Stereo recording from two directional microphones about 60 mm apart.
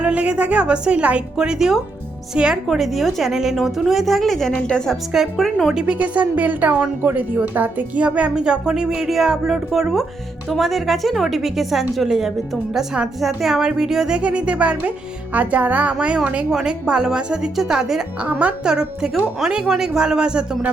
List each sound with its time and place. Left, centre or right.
0.0 s a woman's voice: right
2.6 s a woman's voice: centre
5.1 s a woman's voice: centre
5.9 s a woman's voice: right; by 14.2 s centre
14.2 s speech: right
16.5 s a woman's voice: centre
18.3 s speech: right
18.6 s a woman's voice: centre